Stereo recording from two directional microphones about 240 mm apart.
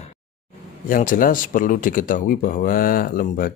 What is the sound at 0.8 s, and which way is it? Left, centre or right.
Speech, left.